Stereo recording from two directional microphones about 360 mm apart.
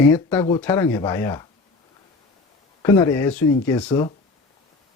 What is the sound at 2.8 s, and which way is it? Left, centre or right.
Speech, centre.